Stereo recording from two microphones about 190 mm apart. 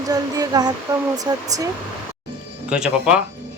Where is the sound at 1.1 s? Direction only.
20° right (ahead or behind).